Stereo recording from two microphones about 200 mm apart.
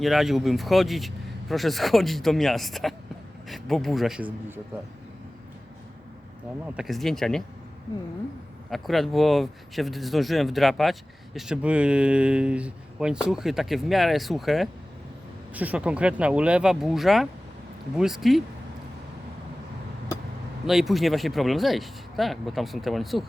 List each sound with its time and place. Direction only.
0.0 s speech: centre (ahead or behind)
6.7 s speech: centre (ahead or behind)
8.7 s speech: centre (ahead or behind)
20.7 s speech: centre (ahead or behind)